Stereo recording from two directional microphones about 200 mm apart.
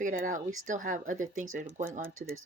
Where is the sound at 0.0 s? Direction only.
40° right (ahead or behind).